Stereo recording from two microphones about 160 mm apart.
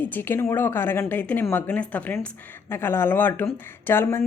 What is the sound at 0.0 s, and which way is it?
A woman's voice, 10° left (ahead or behind).